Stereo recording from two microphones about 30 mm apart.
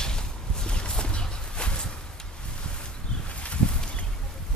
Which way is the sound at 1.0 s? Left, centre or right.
Left.